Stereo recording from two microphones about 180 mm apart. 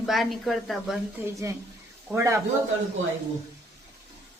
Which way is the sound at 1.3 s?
15° right (ahead or behind).